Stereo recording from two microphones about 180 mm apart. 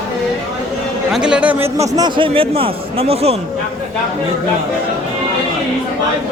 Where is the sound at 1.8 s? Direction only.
25° right (ahead or behind).